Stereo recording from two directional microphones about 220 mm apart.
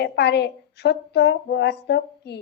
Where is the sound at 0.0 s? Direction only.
50° left (ahead or behind).